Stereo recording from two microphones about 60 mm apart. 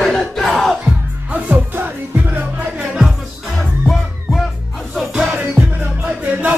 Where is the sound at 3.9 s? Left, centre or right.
Centre.